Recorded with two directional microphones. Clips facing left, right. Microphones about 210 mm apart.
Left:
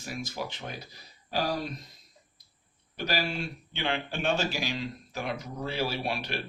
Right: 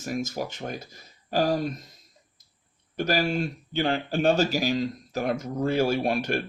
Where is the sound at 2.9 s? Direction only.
45° right (ahead or behind).